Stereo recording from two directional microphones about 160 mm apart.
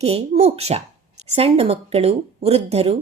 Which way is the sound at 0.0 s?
40° right (ahead or behind).